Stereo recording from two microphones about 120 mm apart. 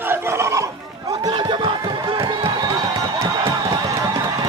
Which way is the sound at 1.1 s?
35° right (ahead or behind).